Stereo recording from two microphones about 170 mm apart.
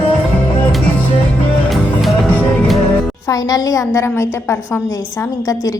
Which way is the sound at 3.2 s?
20° left (ahead or behind).